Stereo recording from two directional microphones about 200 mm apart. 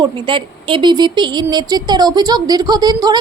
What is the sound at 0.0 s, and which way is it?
A woman's voice, 25° right (ahead or behind).